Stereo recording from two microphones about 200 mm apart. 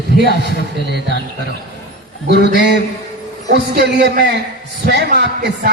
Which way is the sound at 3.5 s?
55° right (ahead or behind).